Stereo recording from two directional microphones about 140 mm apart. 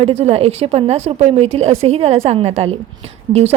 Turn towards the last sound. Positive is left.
turn(degrees=-50)  # may be behind; listen again after turning